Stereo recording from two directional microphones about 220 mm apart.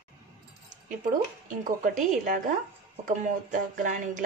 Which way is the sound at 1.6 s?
35° right (ahead or behind).